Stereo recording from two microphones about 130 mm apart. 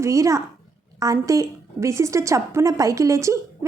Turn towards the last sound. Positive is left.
turn(degrees=-25)  # may be behind; listen again after turning